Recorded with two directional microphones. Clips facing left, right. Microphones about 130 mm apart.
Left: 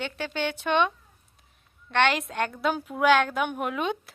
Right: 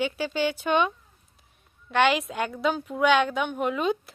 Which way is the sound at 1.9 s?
5° right (ahead or behind).